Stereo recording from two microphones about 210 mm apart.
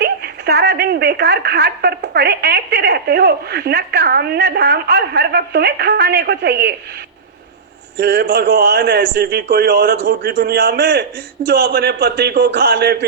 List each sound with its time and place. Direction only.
0.0 s speech: 50° right (ahead or behind)
7.9 s speech: 50° right (ahead or behind)